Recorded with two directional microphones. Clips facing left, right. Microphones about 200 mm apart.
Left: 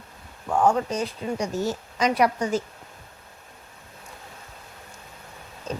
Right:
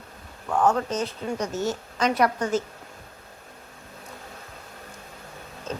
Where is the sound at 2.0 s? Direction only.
10° left (ahead or behind).